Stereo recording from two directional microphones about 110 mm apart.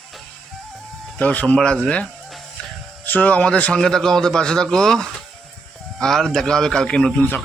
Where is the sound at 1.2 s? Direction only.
15° left (ahead or behind).